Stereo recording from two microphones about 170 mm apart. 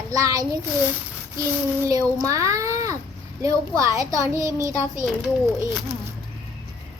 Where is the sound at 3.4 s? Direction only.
20° right (ahead or behind).